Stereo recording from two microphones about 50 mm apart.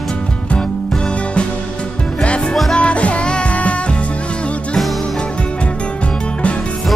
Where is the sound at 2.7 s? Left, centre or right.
Left.